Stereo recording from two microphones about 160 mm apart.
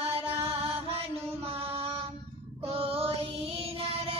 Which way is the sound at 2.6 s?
35° right (ahead or behind).